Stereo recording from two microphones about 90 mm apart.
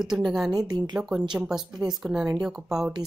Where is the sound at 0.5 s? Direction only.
45° right (ahead or behind).